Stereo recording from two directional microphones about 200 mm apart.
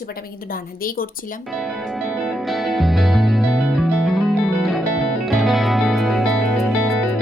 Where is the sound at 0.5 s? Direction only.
45° left (ahead or behind).